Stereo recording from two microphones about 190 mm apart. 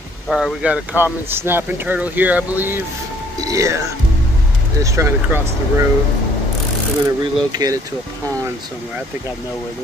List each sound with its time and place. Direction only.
0.3 s speech: 5° right (ahead or behind)
4.8 s speech: 15° right (ahead or behind)
7.1 s speech: 20° right (ahead or behind)